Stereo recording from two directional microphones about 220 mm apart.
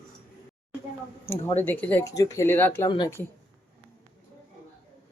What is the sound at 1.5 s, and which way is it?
Speech, 10° left (ahead or behind).